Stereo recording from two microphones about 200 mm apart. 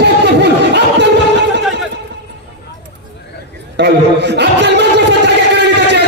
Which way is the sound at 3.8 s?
60° right (ahead or behind).